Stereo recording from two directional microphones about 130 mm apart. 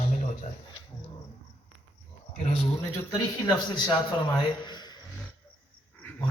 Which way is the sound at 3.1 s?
30° left (ahead or behind).